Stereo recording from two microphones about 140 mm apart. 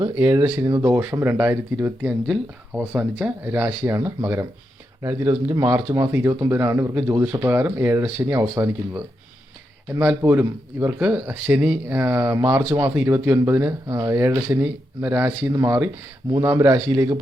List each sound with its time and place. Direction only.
0.0 s speech: 20° right (ahead or behind)
5.5 s speech: 20° right (ahead or behind)